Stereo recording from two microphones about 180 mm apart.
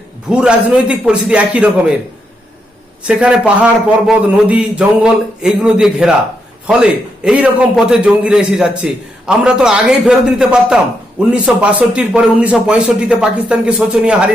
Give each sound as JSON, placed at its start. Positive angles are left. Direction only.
{"t": 0.3, "sound": "a man's voice", "side_deg": -5}
{"t": 3.1, "sound": "a man's voice", "side_deg": -5}
{"t": 7.3, "sound": "a man's voice", "side_deg": -5}